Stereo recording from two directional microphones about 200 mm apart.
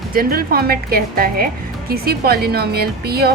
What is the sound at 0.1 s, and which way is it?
A woman's voice, 45° right (ahead or behind).